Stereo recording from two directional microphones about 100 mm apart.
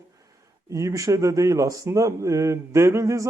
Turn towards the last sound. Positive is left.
turn(degrees=-30)  # may be behind; listen again after turning